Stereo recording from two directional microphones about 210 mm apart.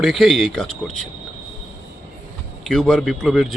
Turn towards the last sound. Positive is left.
turn(degrees=0)  # may be behind; listen again after turning